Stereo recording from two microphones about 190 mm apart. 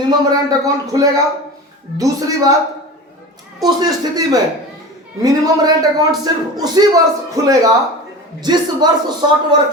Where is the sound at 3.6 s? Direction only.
20° right (ahead or behind).